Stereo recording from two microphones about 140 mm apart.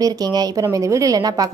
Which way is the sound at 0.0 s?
25° right (ahead or behind).